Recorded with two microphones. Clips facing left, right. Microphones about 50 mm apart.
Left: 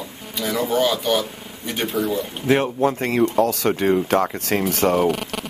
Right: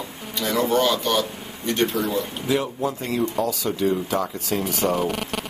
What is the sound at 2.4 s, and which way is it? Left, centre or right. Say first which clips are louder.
Speech: left 7 dB; left.